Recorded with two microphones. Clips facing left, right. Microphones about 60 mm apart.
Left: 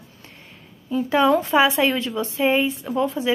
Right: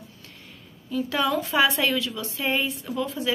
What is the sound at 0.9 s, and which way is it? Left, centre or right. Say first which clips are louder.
Speech: left 7 dB; left.